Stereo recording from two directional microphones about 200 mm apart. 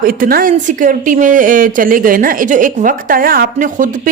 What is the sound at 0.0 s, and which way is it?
A woman's voice, 45° right (ahead or behind).